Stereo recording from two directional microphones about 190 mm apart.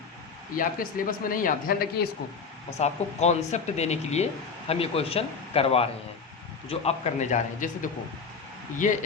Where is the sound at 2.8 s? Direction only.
35° left (ahead or behind).